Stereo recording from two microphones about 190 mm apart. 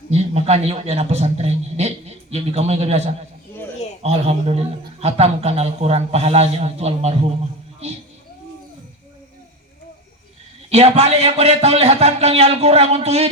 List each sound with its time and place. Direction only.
0.1 s a man's voice: 35° right (ahead or behind)
10.7 s a man's voice: 35° right (ahead or behind)